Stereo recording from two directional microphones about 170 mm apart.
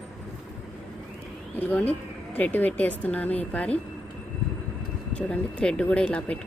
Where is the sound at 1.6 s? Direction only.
10° left (ahead or behind).